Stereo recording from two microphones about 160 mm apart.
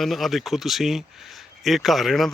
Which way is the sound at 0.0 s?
Centre (ahead or behind).